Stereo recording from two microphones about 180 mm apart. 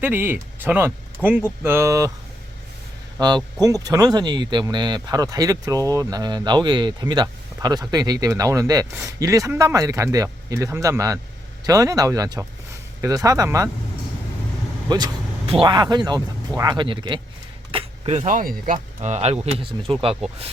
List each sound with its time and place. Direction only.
0.0 s speech: 10° right (ahead or behind)
3.2 s speech: 25° right (ahead or behind)
14.8 s speech: 25° right (ahead or behind)